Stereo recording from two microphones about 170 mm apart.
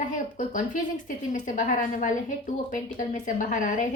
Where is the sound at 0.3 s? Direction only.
50° left (ahead or behind).